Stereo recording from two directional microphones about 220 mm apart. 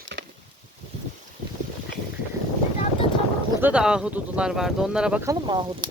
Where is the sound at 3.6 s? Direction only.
5° right (ahead or behind); by 5.9 s 20° right (ahead or behind).